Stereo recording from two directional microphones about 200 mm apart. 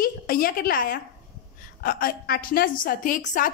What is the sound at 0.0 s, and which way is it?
A woman's voice, 45° left (ahead or behind).